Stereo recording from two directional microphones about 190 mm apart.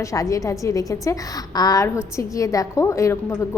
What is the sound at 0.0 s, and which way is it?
A woman's voice, 15° left (ahead or behind).